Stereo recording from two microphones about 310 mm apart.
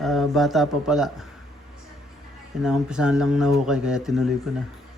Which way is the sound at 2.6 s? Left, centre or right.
Centre.